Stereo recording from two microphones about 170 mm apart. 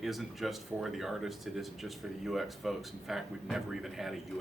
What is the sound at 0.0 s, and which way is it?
Speech, centre (ahead or behind).